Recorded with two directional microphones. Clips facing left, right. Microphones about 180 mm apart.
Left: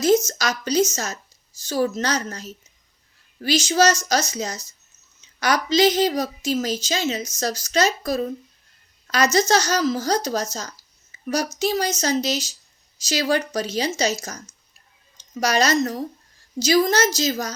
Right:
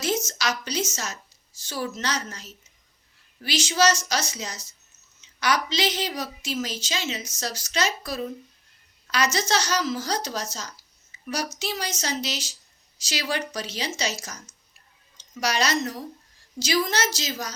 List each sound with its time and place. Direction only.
0.3 s a woman's voice: 40° left (ahead or behind)
11.1 s a sound: 45° left (ahead or behind)
11.6 s a woman's voice: 40° left (ahead or behind)